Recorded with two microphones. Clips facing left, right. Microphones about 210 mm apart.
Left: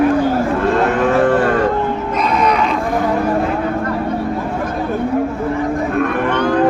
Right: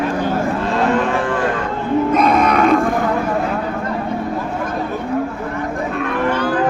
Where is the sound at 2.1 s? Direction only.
50° right (ahead or behind).